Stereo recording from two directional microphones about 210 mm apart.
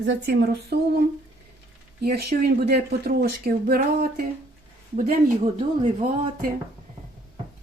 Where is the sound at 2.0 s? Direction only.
50° right (ahead or behind).